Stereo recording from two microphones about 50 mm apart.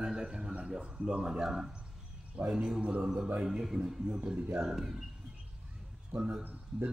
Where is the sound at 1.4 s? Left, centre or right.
Centre; by 3.1 s right.